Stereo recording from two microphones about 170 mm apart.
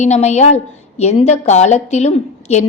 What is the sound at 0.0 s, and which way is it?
A woman's voice, 40° left (ahead or behind).